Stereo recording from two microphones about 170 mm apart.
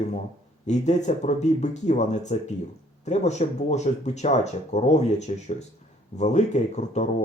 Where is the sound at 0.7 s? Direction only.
45° left (ahead or behind).